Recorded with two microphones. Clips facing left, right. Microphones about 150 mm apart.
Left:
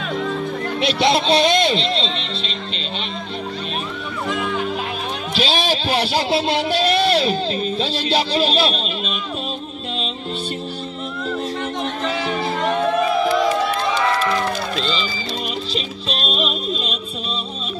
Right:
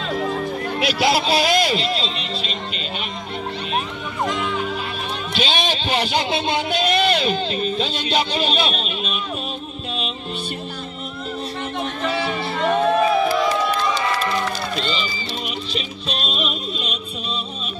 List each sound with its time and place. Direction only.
0.7 s speech: 5° right (ahead or behind)
1.6 s speech: 25° left (ahead or behind)
5.3 s a sound: 35° left (ahead or behind)
6.8 s a sound: centre (ahead or behind)
7.1 s speech: 35° left (ahead or behind)
14.0 s music: 70° left (ahead or behind)
16.3 s music: 30° left (ahead or behind)